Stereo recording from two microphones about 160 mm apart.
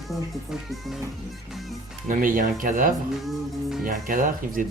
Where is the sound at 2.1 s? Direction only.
60° right (ahead or behind).